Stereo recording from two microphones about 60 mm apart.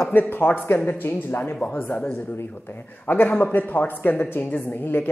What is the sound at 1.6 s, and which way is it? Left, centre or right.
Speech, left.